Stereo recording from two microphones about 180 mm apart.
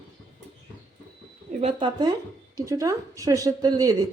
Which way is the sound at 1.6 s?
30° right (ahead or behind).